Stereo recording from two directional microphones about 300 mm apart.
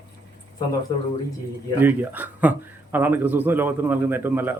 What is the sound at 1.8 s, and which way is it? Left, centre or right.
Speech, centre.